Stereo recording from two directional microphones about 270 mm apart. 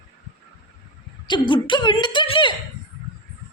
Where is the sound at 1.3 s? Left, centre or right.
Centre.